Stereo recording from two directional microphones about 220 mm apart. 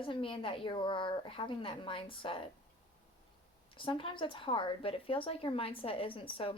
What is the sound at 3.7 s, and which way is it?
A woman's voice, 25° left (ahead or behind).